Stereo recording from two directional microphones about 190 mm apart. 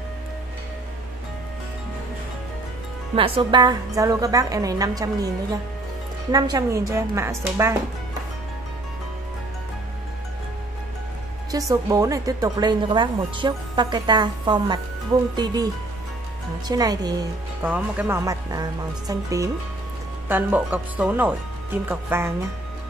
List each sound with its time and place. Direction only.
3.2 s a woman's voice: 30° right (ahead or behind)
11.7 s a woman's voice: 20° right (ahead or behind)